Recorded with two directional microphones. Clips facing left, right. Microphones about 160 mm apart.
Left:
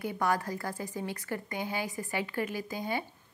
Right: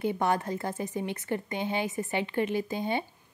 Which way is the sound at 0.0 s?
25° right (ahead or behind).